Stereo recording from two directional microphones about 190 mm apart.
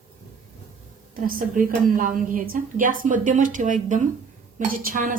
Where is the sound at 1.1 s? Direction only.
45° right (ahead or behind).